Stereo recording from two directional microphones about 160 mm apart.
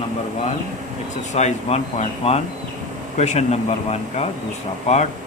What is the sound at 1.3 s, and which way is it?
Speech, 40° left (ahead or behind).